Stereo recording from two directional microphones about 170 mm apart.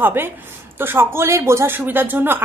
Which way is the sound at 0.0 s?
15° right (ahead or behind).